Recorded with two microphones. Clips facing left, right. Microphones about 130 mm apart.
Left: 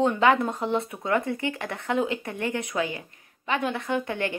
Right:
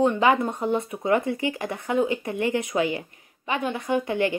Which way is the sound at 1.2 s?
55° left (ahead or behind).